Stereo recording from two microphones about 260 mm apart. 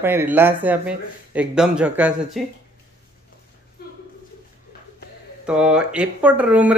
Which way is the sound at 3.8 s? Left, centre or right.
Left.